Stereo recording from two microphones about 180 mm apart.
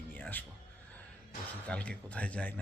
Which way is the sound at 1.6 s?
5° left (ahead or behind).